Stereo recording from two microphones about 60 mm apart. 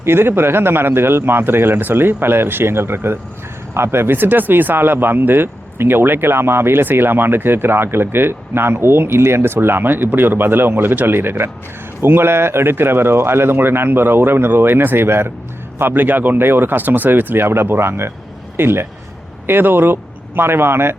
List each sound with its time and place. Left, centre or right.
0.0 s a man's voice: right